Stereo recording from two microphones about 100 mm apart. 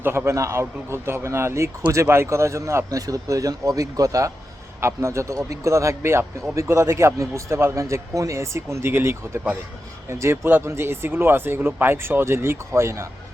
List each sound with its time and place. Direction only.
0.0 s a man's voice: 25° right (ahead or behind)